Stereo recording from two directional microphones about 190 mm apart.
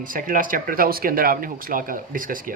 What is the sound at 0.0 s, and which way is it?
Speech, 45° right (ahead or behind).